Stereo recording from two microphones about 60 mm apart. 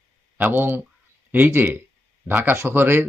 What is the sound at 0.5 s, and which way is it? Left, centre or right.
Speech, right.